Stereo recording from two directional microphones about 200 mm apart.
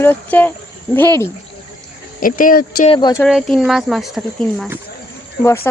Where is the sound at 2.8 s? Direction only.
25° left (ahead or behind).